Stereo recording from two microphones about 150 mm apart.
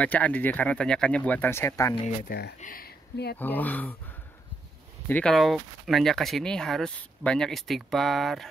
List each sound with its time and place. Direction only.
0.0 s speech: 10° left (ahead or behind)
2.0 s speech: 85° left
3.3 s speech: 10° left (ahead or behind)
5.0 s speech: 10° left (ahead or behind)